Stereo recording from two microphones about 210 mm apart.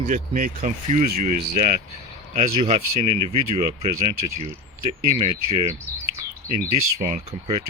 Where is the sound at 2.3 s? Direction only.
30° right (ahead or behind).